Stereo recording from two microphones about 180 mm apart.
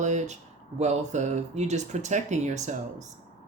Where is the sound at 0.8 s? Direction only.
40° right (ahead or behind).